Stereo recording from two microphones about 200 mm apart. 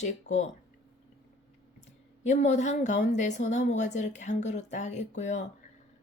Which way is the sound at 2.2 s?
35° left (ahead or behind).